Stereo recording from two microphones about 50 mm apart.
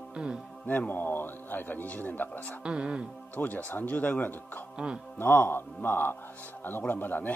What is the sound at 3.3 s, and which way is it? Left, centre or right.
A man's voice, left.